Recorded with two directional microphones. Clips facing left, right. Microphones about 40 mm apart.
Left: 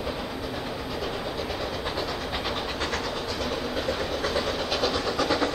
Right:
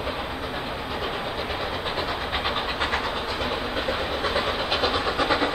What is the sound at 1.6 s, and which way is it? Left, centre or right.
Train, right.